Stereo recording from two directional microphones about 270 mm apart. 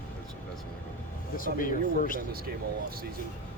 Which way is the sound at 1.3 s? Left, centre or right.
Left.